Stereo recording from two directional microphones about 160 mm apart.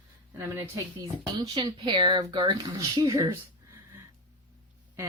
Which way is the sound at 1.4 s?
30° right (ahead or behind).